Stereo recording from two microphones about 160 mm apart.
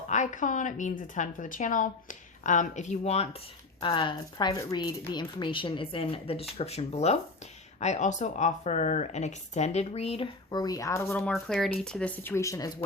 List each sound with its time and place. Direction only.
0.1 s a woman's voice: 50° left (ahead or behind)
3.8 s a woman's voice: 30° left (ahead or behind)
10.5 s a woman's voice: 25° left (ahead or behind)
11.2 s speech: 5° left (ahead or behind); by 12.7 s 20° left (ahead or behind)